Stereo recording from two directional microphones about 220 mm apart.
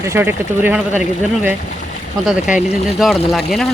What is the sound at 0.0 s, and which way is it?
Speech, 10° right (ahead or behind).